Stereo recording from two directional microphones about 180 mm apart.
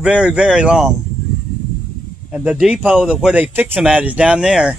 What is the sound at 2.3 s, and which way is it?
Speech, 5° right (ahead or behind).